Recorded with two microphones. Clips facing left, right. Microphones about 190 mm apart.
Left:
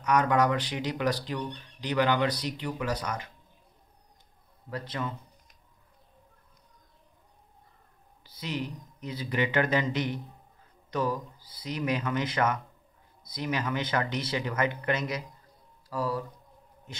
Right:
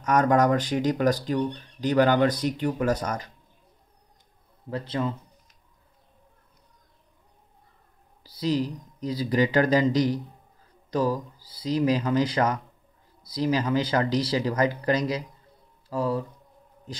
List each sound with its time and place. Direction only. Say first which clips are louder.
0.0 s speech: right 4 dB; 45° right (ahead or behind)
4.6 s a man's voice: right 6 dB; 30° right (ahead or behind)
8.2 s speech: right 9 dB; 35° right (ahead or behind)